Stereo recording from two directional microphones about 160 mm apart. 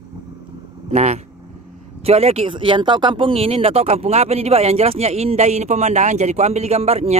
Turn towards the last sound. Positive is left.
turn(degrees=-40)  # may be behind; listen again after turning